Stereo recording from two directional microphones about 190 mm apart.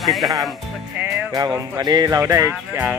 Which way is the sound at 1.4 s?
20° right (ahead or behind).